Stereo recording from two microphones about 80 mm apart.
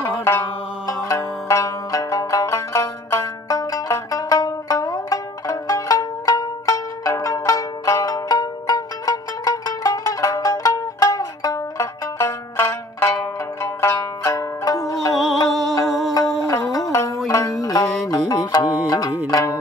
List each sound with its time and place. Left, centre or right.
0.0 s music: left
1.1 s music: left
3.4 s music: left
8.1 s music: left
12.2 s music: left
13.6 s zither: left
15.1 s music: centre
16.7 s music: left